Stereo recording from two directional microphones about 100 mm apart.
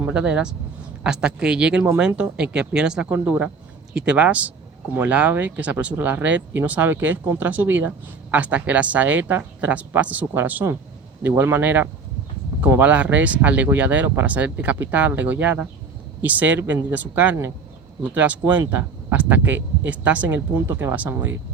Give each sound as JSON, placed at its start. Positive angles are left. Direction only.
{"t": 0.1, "sound": "speech", "side_deg": -10}